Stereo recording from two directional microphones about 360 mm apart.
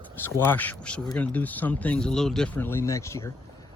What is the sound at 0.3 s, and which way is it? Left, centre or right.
Speech, centre.